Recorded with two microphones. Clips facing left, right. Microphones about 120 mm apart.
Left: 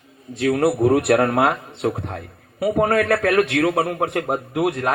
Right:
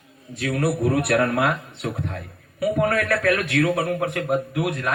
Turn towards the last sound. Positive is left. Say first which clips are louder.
# left 4 dB
turn(degrees=35)  # may be behind; listen again after turning